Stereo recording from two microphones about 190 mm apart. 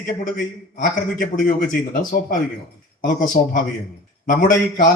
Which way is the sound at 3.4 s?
35° left (ahead or behind).